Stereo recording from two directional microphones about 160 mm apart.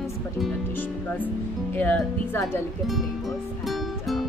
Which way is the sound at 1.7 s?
10° left (ahead or behind).